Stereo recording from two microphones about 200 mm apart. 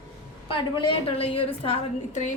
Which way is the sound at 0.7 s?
25° left (ahead or behind).